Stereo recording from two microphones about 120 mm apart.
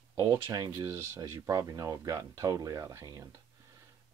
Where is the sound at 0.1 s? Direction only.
30° right (ahead or behind).